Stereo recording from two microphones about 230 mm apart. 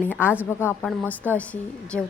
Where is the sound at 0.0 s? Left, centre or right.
Centre.